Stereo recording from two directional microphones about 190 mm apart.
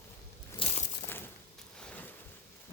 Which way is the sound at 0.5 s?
30° left (ahead or behind).